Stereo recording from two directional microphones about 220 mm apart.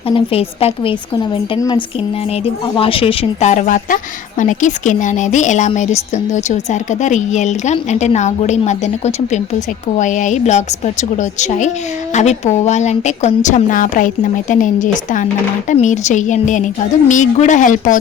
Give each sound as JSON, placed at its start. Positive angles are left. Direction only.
{"t": 0.1, "sound": "a woman's voice", "side_deg": 25}